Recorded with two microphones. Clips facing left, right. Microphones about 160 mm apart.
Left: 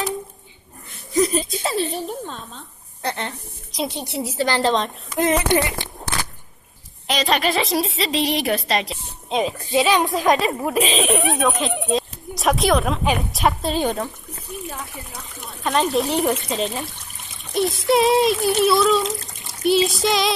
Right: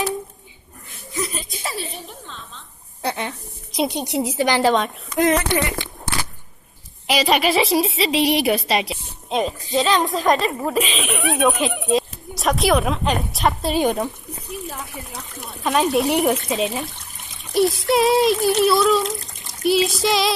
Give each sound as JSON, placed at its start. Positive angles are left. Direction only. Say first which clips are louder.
{"t": 1.1, "sound": "giggle", "louder": "left 9 dB", "side_deg": 40}
{"t": 1.6, "sound": "a woman's voice", "louder": "left 7 dB", "side_deg": 40}
{"t": 3.0, "sound": "a woman's voice", "louder": "right 1 dB", "side_deg": -10}
{"t": 7.1, "sound": "a woman's voice", "louder": "right 2 dB", "side_deg": -10}
{"t": 9.7, "sound": "a woman's voice", "louder": "left 1 dB", "side_deg": 15}
{"t": 10.1, "sound": "speech", "louder": "even", "side_deg": 0}
{"t": 10.8, "sound": "a woman's voice", "louder": "left 3 dB", "side_deg": 35}
{"t": 11.3, "sound": "speech", "louder": "right 2 dB", "side_deg": 0}
{"t": 13.7, "sound": "a woman's voice", "louder": "right 3 dB", "side_deg": -15}
{"t": 15.4, "sound": "a woman's voice", "louder": "right 1 dB", "side_deg": 0}